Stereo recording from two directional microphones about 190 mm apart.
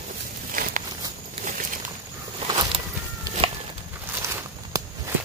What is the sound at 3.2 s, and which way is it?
Walk, 30° right (ahead or behind).